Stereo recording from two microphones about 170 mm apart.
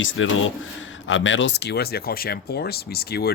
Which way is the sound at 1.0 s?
90° left.